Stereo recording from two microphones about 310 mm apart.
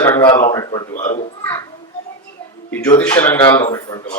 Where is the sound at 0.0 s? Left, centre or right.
Centre.